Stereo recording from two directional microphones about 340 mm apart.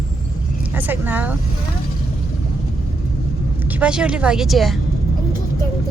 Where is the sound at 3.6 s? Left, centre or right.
Centre.